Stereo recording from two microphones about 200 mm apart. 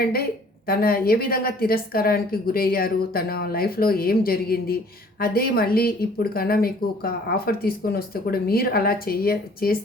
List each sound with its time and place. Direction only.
0.7 s speech: 50° left (ahead or behind)